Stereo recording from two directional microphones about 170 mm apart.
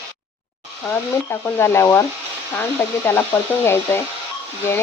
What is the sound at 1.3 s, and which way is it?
Speech, 15° left (ahead or behind).